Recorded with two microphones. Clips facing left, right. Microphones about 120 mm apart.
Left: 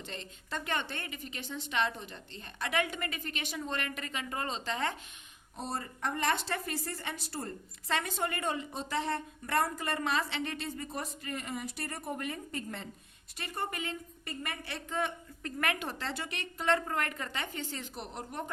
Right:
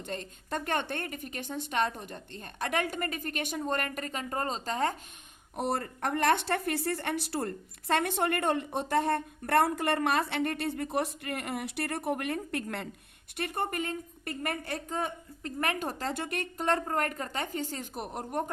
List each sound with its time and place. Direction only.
0.0 s a woman's voice: 50° right (ahead or behind)
5.5 s a woman's voice: 60° right (ahead or behind)